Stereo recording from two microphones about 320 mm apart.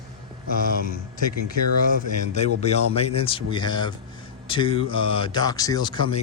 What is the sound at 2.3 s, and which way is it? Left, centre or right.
Speech, left.